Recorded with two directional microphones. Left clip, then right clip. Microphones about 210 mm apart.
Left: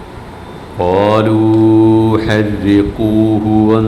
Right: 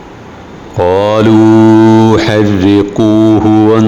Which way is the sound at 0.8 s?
30° right (ahead or behind).